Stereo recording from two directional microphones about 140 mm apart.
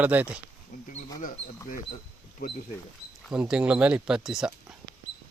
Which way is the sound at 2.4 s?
70° left (ahead or behind).